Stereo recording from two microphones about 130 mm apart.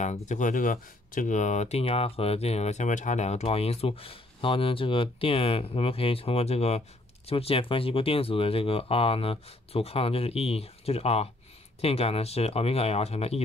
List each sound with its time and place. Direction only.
0.0 s speech: 65° left (ahead or behind)